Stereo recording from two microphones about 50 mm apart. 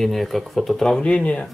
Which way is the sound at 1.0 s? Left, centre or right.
Left.